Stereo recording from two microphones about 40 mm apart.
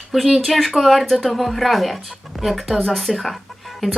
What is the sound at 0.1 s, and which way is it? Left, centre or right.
A woman's voice, centre.